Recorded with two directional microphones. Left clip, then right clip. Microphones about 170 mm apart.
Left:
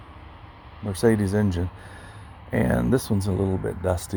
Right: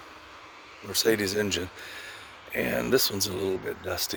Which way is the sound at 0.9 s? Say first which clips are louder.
Left 3 dB; 30° right (ahead or behind).